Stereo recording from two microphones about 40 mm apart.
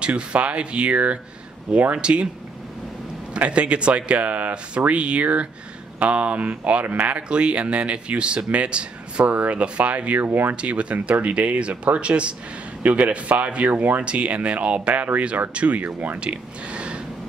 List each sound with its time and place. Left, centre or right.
0.0 s speech: right
3.3 s speech: right
14.0 s speech: right
16.2 s speech: right